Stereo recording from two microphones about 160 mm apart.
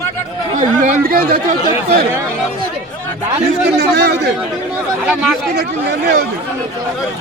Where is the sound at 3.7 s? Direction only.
90° right.